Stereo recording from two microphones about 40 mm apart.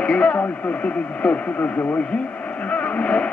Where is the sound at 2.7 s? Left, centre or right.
Left.